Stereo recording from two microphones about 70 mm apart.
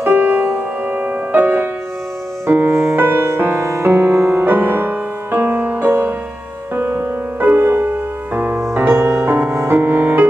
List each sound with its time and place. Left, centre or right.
0.0 s music: right